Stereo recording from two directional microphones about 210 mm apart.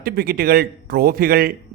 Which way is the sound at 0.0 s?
45° right (ahead or behind).